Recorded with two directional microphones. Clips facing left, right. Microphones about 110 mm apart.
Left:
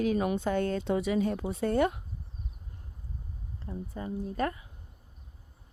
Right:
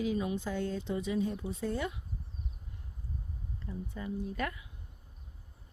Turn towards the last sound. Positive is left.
turn(degrees=35)  # may be behind; listen again after turning